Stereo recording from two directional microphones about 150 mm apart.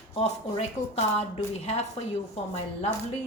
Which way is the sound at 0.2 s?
40° left (ahead or behind).